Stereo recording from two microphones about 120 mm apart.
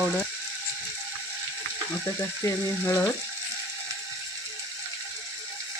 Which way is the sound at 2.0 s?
25° left (ahead or behind).